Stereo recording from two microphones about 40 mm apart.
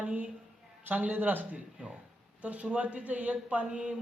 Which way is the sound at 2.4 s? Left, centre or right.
Right.